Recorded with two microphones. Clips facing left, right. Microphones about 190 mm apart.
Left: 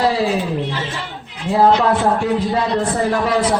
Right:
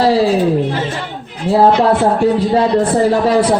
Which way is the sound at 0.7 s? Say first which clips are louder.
Right 6 dB; 50° right (ahead or behind).